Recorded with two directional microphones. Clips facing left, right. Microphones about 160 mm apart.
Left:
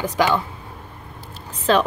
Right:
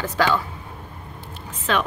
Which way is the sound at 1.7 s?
35° left (ahead or behind).